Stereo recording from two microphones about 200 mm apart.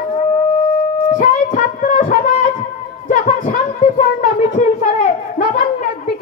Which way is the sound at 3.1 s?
40° left (ahead or behind).